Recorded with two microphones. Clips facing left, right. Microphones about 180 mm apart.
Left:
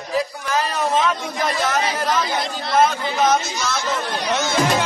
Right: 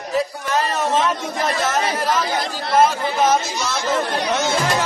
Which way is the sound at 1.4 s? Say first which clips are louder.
Even; 5° right (ahead or behind).